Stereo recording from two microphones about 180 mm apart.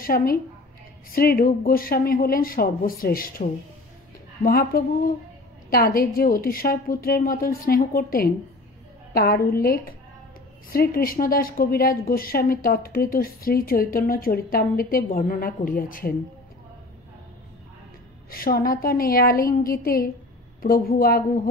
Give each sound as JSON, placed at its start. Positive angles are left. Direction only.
{"t": 0.0, "sound": "a woman's voice", "side_deg": 55}
{"t": 18.3, "sound": "a woman's voice", "side_deg": 55}